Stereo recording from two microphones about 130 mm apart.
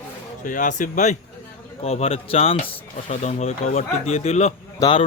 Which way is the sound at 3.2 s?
60° left (ahead or behind).